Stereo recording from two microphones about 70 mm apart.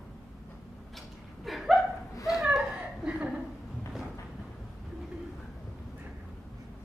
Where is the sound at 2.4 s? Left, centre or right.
Centre.